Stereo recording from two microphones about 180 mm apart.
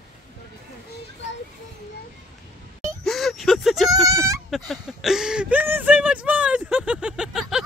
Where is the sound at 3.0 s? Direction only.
Centre (ahead or behind).